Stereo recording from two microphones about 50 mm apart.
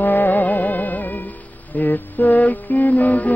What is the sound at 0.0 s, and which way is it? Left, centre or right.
Music, left.